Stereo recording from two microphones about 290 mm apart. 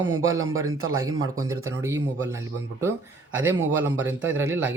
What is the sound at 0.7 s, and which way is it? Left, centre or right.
Speech, right.